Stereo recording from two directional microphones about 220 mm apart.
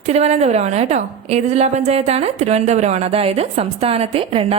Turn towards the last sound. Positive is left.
turn(degrees=-25)  # may be behind; listen again after turning